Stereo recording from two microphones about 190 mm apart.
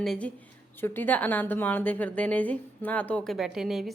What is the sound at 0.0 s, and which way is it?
A woman's voice, centre (ahead or behind).